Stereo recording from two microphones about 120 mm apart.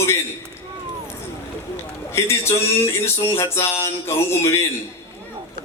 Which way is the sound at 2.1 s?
20° left (ahead or behind).